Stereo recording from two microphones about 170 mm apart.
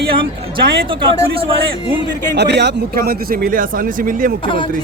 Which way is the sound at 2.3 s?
80° right.